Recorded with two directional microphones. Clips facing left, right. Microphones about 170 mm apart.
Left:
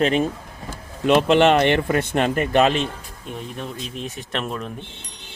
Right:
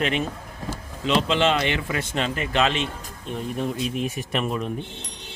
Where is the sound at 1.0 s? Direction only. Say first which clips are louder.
Left 6 dB; 55° left (ahead or behind).